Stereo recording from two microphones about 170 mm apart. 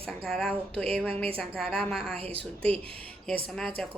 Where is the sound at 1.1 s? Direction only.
35° right (ahead or behind).